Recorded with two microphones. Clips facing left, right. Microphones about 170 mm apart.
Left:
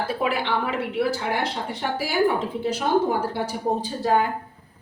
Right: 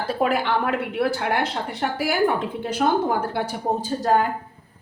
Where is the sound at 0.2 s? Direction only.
50° right (ahead or behind).